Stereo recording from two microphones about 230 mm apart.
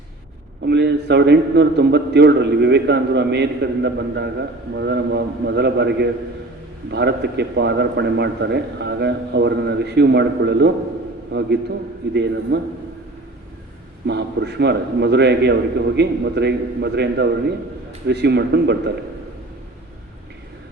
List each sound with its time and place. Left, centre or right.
0.6 s a man's voice: right
14.1 s a man's voice: right